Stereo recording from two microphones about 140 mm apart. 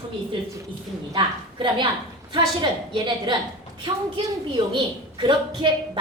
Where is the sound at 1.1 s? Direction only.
35° right (ahead or behind).